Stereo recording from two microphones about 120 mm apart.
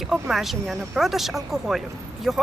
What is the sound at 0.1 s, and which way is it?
Speech, centre (ahead or behind).